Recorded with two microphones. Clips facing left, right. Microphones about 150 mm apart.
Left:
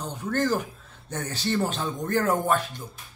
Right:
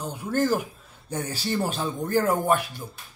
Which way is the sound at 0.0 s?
10° right (ahead or behind).